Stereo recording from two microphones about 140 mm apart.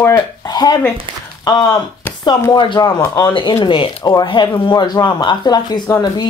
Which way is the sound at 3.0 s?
20° left (ahead or behind).